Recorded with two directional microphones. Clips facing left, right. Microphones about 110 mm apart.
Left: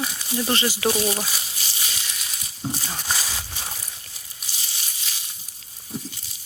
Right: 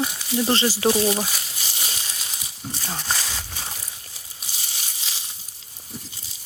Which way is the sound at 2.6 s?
35° left (ahead or behind).